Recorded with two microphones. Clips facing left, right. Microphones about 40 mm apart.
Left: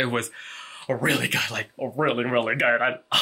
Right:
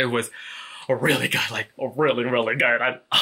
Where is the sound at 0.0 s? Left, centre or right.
Centre.